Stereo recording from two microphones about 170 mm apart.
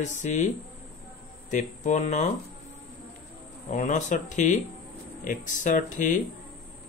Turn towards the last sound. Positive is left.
turn(degrees=50)  # may be behind; listen again after turning